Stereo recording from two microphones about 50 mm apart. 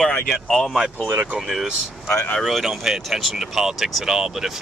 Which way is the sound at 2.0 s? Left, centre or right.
Left.